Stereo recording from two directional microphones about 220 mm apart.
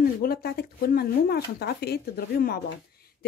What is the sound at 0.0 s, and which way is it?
A woman's voice, 45° left (ahead or behind).